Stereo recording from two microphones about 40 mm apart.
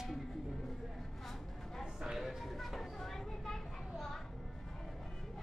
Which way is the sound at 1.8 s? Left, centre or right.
Centre.